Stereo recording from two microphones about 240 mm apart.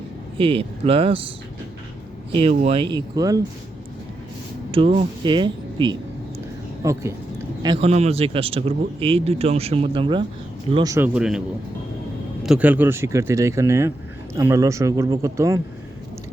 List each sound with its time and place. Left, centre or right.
0.3 s speech: right
2.3 s speech: right
4.7 s speech: right